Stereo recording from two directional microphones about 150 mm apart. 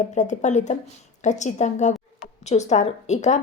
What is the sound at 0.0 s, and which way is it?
A woman's voice, 55° left (ahead or behind).